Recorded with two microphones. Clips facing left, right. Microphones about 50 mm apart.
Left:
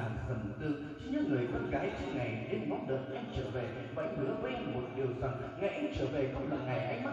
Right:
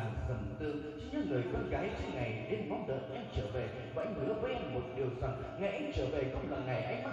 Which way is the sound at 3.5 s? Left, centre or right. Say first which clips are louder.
Even; centre.